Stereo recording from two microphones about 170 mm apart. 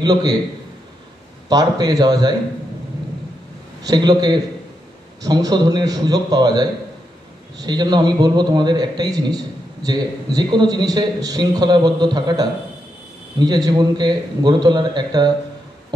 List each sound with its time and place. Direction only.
0.0 s a man's voice: 25° right (ahead or behind)
1.5 s a man's voice: 20° right (ahead or behind)
3.8 s a man's voice: 25° right (ahead or behind)